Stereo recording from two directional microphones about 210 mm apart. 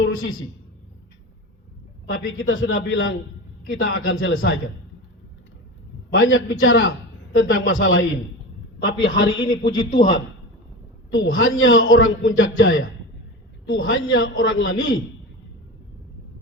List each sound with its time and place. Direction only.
0.0 s a woman's voice: 70° left (ahead or behind)
2.2 s a man's voice: 70° left (ahead or behind)
6.1 s a man's voice: 65° left (ahead or behind)
9.6 s a man's voice: 50° left (ahead or behind)
11.1 s a man's voice: 70° left (ahead or behind)